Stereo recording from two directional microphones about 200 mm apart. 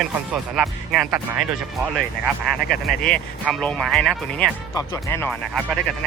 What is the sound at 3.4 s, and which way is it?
Speech, 5° left (ahead or behind).